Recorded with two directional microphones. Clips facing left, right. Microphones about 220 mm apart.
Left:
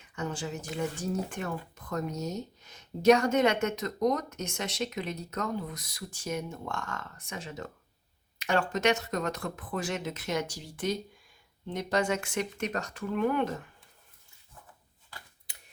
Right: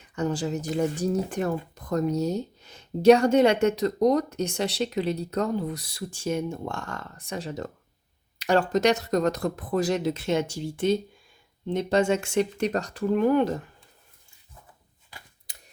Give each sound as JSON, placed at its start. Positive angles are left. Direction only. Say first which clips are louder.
{"t": 0.2, "sound": "speech", "louder": "right 8 dB", "side_deg": -35}